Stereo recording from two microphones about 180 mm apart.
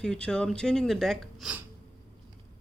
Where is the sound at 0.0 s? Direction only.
5° left (ahead or behind).